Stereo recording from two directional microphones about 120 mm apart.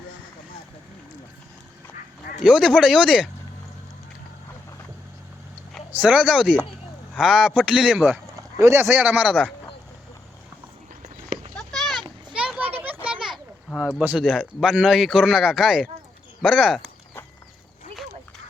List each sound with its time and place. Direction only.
2.4 s speech: 5° right (ahead or behind)
6.0 s speech: 10° right (ahead or behind)
8.4 s speech: 25° right (ahead or behind)
11.0 s a sound: 80° right
11.5 s children playing: centre (ahead or behind)
14.0 s speech: 10° right (ahead or behind)